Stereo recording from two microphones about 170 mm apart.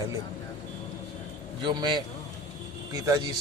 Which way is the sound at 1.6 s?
25° right (ahead or behind).